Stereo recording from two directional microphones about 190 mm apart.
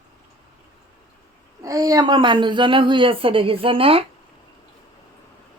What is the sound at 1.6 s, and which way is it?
Speech, 20° right (ahead or behind).